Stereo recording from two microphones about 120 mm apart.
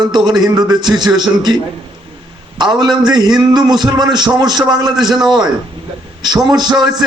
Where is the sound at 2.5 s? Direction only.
40° right (ahead or behind).